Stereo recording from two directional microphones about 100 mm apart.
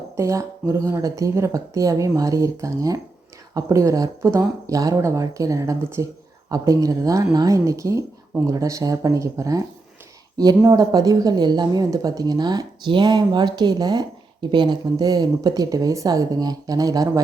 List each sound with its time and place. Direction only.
0.2 s speech: 30° right (ahead or behind)